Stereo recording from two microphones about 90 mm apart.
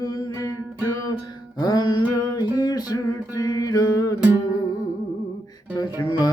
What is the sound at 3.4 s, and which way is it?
Mantra, 40° left (ahead or behind).